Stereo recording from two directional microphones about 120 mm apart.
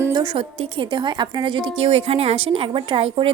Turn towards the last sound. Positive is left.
turn(degrees=-50)  # may be behind; listen again after turning